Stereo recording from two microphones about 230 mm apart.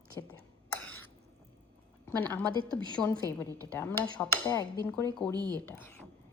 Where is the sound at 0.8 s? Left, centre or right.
Centre.